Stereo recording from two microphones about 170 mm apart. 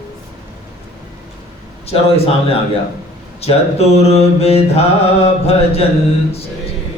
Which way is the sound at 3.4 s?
40° left (ahead or behind).